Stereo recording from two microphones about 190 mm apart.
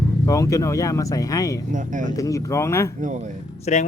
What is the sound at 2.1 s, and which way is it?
Speech, 15° left (ahead or behind).